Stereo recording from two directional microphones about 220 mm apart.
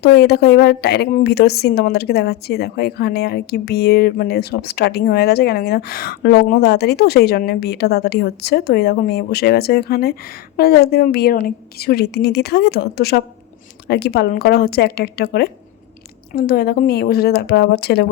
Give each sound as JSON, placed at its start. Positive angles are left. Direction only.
{"t": 0.0, "sound": "a woman's voice", "side_deg": 45}